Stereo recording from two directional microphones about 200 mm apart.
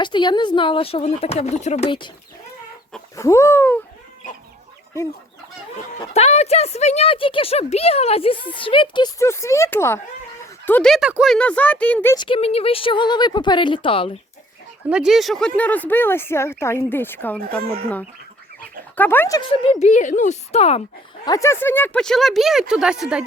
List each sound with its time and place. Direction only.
0.0 s speech: 20° left (ahead or behind)
3.2 s speech: 15° left (ahead or behind)
6.1 s speech: 30° left (ahead or behind); by 12.1 s 5° left (ahead or behind)
12.1 s speech: 25° left (ahead or behind)
14.8 s speech: 5° right (ahead or behind)
17.6 s speech: 50° right (ahead or behind)
18.9 s speech: 10° left (ahead or behind)
19.4 s speech: 25° left (ahead or behind)
21.2 s speech: 15° left (ahead or behind); by 23.2 s 5° right (ahead or behind)